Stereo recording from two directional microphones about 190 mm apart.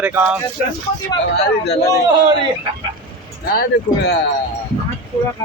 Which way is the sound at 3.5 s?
60° left (ahead or behind).